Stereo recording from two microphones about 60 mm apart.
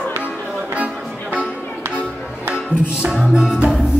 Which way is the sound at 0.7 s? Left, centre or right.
Right.